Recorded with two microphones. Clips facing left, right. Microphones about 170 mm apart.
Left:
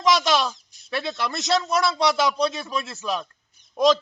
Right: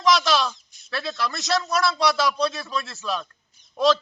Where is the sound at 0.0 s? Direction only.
20° left (ahead or behind).